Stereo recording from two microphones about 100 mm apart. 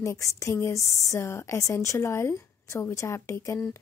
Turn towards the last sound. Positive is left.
turn(degrees=30)  # may be behind; listen again after turning